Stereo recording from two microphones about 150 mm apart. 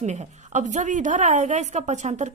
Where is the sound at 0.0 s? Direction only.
50° right (ahead or behind).